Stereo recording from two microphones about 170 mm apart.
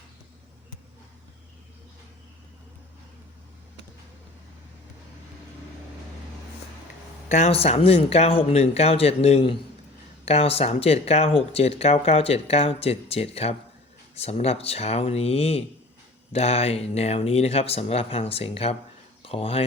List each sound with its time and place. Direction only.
7.3 s speech: 40° left (ahead or behind)